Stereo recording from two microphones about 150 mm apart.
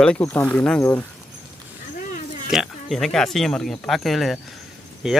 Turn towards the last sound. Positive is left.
turn(degrees=0)  # may be behind; listen again after turning